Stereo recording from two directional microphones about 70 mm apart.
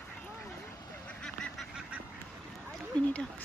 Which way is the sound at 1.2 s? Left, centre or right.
Centre.